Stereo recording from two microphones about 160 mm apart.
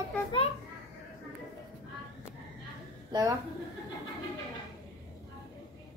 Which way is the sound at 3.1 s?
25° right (ahead or behind).